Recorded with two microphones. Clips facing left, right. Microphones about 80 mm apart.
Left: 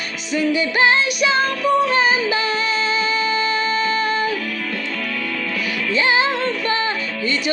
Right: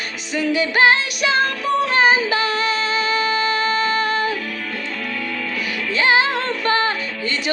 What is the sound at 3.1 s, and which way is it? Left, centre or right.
Music, right.